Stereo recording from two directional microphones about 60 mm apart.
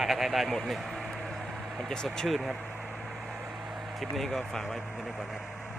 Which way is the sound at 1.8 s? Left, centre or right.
Centre.